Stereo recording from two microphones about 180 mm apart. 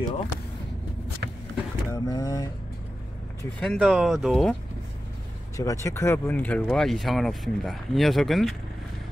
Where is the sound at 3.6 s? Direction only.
Centre (ahead or behind).